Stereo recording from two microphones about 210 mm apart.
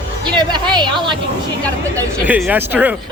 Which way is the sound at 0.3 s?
20° right (ahead or behind).